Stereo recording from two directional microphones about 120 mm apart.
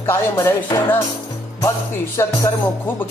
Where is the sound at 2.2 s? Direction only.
25° left (ahead or behind).